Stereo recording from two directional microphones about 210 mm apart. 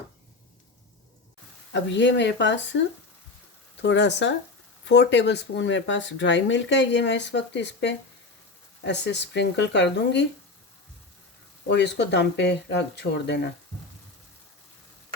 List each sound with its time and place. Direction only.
1.7 s speech: 60° left (ahead or behind)
11.7 s speech: 55° left (ahead or behind)